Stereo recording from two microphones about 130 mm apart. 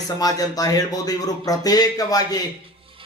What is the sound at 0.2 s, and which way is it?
Speech, 30° left (ahead or behind).